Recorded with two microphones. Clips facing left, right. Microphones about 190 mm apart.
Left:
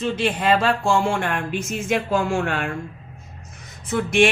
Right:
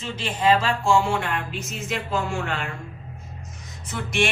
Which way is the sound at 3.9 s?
55° left (ahead or behind).